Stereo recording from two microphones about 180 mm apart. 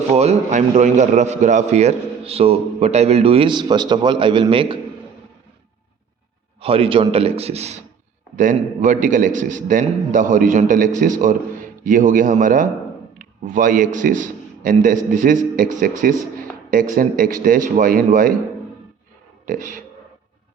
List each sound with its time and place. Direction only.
0.1 s a man's voice: 40° right (ahead or behind)
6.6 s a man's voice: 30° right (ahead or behind); by 18.3 s 50° right (ahead or behind)
19.5 s a man's voice: 45° right (ahead or behind)